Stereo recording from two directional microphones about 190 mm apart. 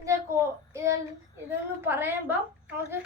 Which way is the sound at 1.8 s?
10° right (ahead or behind).